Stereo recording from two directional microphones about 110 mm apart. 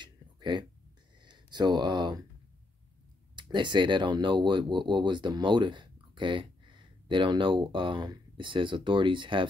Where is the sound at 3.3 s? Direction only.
45° right (ahead or behind).